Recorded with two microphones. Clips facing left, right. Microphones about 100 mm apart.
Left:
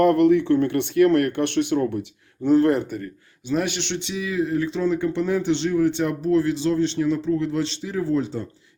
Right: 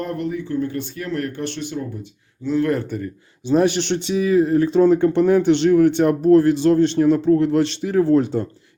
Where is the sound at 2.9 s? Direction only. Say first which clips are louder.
Right 4 dB; centre (ahead or behind).